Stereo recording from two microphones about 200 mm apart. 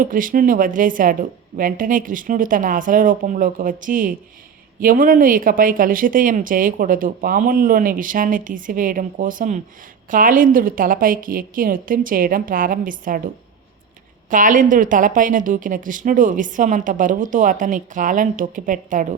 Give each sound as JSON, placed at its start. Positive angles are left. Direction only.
{"t": 0.0, "sound": "a woman's voice", "side_deg": -40}